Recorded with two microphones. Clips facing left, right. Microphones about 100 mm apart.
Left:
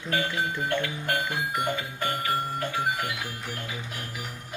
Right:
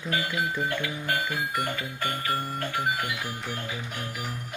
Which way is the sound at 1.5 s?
5° left (ahead or behind).